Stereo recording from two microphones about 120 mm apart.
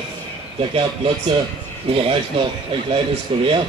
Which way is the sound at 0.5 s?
50° right (ahead or behind).